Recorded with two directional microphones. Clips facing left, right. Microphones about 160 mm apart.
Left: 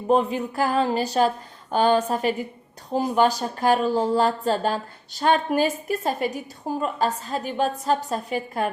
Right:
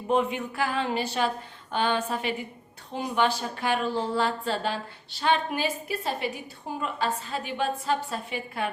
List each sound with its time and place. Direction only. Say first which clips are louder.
0.1 s a woman's voice: left 5 dB; 35° left (ahead or behind)